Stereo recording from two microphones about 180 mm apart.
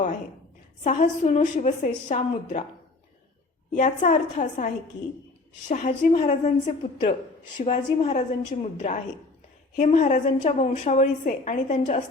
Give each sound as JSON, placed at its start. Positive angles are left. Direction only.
{"t": 0.9, "sound": "a woman's voice", "side_deg": 40}
{"t": 3.7, "sound": "a woman's voice", "side_deg": 40}